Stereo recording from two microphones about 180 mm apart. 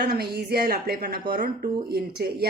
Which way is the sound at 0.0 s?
65° right (ahead or behind).